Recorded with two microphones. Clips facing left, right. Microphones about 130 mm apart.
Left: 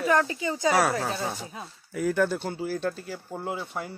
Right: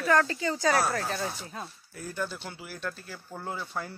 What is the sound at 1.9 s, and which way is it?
Speech, 90° left.